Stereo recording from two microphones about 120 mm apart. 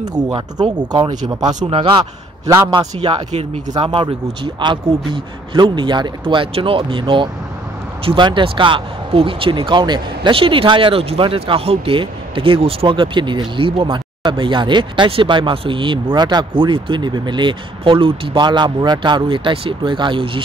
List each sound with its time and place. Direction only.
0.0 s speech: 35° right (ahead or behind)
3.7 s speech: 45° right (ahead or behind)